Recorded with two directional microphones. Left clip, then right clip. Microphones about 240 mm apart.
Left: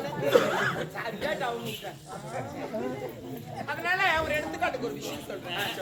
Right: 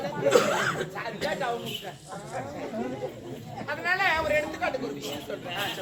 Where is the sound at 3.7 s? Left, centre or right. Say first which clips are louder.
Right 1 dB; centre.